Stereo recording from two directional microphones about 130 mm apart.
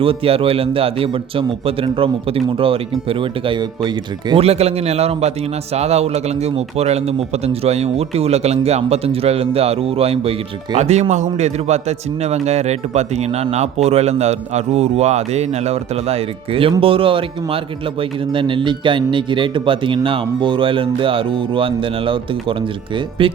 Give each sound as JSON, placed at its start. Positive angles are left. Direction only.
{"t": 0.0, "sound": "speech", "side_deg": -45}
{"t": 4.4, "sound": "speech", "side_deg": -55}
{"t": 10.8, "sound": "speech", "side_deg": -60}